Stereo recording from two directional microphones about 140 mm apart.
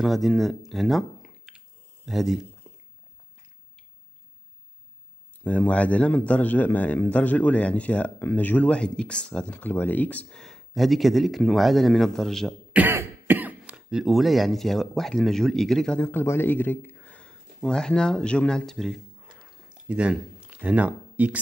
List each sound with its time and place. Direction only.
0.0 s speech: centre (ahead or behind)
5.4 s a man's voice: 10° left (ahead or behind)
12.7 s speech: 15° right (ahead or behind); by 16.1 s 5° left (ahead or behind)
16.1 s speech: 15° left (ahead or behind)
19.3 s a sound: 5° right (ahead or behind)